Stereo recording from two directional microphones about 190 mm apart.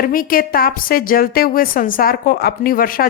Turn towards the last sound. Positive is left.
turn(degrees=50)  # may be behind; listen again after turning